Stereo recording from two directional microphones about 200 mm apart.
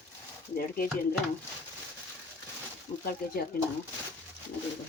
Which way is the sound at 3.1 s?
50° left (ahead or behind).